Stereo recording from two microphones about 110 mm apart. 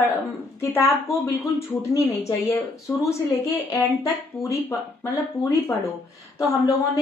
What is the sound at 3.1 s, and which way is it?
Speech, 25° left (ahead or behind).